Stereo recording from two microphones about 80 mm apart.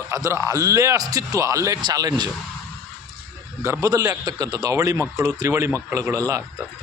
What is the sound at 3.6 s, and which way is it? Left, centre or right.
A man's voice, right.